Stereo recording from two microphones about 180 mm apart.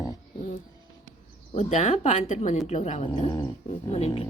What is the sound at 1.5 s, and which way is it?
Speech, 40° left (ahead or behind).